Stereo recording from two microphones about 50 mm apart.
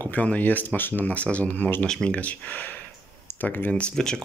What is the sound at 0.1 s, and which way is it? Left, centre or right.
Speech, left.